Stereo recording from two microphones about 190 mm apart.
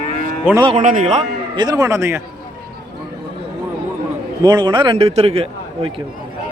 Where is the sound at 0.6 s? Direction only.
35° right (ahead or behind).